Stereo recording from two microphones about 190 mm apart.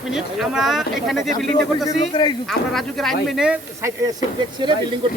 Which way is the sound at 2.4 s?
Centre (ahead or behind).